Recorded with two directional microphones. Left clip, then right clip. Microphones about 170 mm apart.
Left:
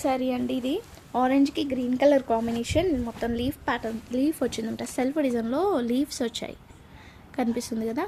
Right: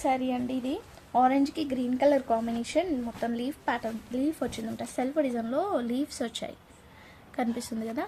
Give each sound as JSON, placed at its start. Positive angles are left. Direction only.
{"t": 0.0, "sound": "a woman's voice", "side_deg": 30}